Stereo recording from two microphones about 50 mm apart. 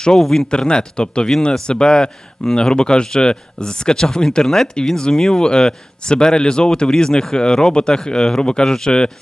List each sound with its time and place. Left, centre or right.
0.2 s a man's voice: centre